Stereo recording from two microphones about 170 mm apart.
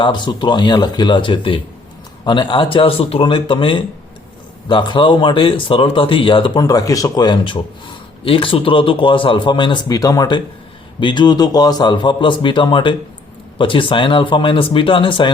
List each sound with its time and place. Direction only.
0.0 s speech: 25° left (ahead or behind)